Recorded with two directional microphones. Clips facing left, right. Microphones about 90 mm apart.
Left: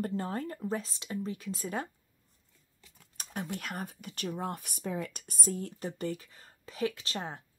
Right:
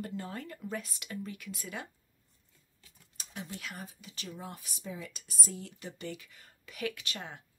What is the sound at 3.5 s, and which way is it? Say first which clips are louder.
Speech: left 5 dB; 50° left (ahead or behind).